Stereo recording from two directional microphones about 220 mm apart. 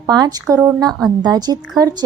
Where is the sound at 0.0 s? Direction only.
20° right (ahead or behind).